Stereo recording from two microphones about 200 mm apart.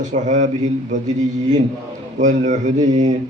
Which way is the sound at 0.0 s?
35° right (ahead or behind).